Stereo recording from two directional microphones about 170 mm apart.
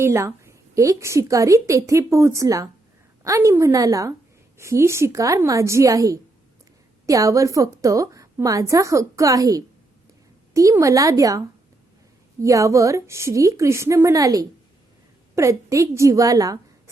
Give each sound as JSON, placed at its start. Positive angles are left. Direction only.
{"t": 0.0, "sound": "a woman's voice", "side_deg": -15}